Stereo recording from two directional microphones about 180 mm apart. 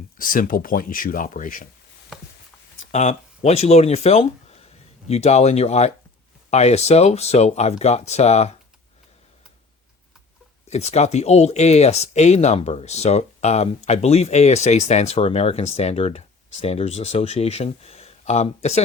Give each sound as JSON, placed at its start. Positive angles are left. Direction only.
{"t": 0.2, "sound": "speech", "side_deg": 50}
{"t": 2.8, "sound": "speech", "side_deg": 40}
{"t": 10.7, "sound": "speech", "side_deg": 40}